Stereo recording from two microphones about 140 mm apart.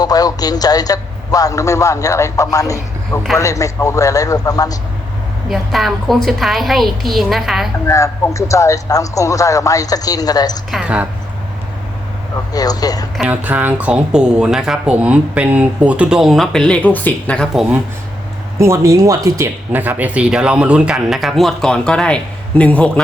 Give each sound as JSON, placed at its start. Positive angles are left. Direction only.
{"t": 0.0, "sound": "a man's voice", "side_deg": 25}
{"t": 5.5, "sound": "speech", "side_deg": 0}
{"t": 7.9, "sound": "a man's voice", "side_deg": 20}
{"t": 10.7, "sound": "speech", "side_deg": -5}
{"t": 12.5, "sound": "a man's voice", "side_deg": 25}
{"t": 13.1, "sound": "speech", "side_deg": -10}
{"t": 18.6, "sound": "speech", "side_deg": -20}